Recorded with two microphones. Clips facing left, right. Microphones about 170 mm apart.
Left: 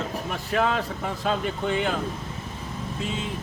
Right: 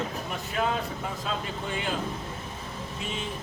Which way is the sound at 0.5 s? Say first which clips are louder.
Left 5 dB; 90° left.